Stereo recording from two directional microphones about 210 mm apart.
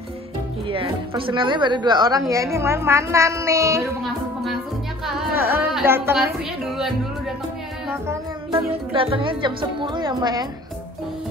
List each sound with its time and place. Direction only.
0.7 s a woman's voice: 25° right (ahead or behind)
5.3 s a sound: 10° right (ahead or behind)
5.8 s a woman's voice: 10° right (ahead or behind)
8.5 s speech: 25° right (ahead or behind)